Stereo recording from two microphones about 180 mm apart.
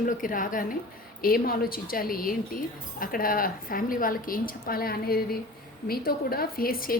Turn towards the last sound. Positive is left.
turn(degrees=55)  # may be behind; listen again after turning